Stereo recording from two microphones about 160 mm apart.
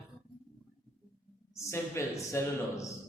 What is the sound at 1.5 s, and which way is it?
Speech, 15° left (ahead or behind).